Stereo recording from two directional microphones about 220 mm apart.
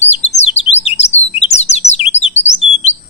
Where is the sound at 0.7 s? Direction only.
30° left (ahead or behind).